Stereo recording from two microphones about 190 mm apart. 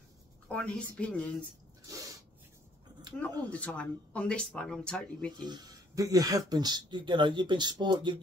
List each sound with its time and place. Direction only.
0.5 s a woman's voice: 5° left (ahead or behind)
1.9 s sneeze: 20° right (ahead or behind)
3.2 s speech: 5° left (ahead or behind)
5.4 s speech: 20° right (ahead or behind)